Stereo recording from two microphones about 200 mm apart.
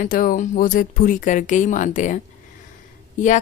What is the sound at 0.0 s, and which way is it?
A woman's voice, 45° left (ahead or behind).